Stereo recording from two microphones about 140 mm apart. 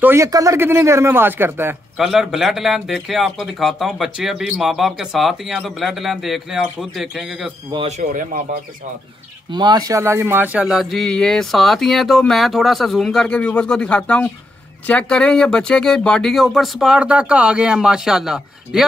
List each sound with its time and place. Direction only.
0.0 s speech: 20° right (ahead or behind)
2.0 s speech: 5° right (ahead or behind)
8.0 s speech: 70° right (ahead or behind)
9.5 s speech: 30° right (ahead or behind); by 18.9 s 5° right (ahead or behind)